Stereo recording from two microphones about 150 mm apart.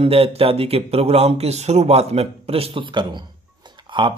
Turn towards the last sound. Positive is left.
turn(degrees=-35)  # may be behind; listen again after turning